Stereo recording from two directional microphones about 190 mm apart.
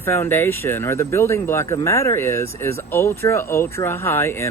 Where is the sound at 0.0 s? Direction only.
15° left (ahead or behind).